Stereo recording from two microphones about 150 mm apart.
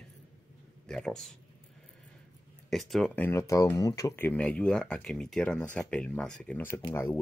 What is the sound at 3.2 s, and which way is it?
Speech, 20° left (ahead or behind).